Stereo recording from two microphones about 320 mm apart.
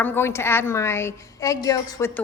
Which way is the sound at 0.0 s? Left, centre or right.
Centre.